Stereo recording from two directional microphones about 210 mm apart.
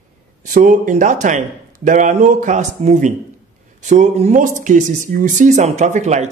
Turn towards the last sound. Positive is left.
turn(degrees=-35)  # may be behind; listen again after turning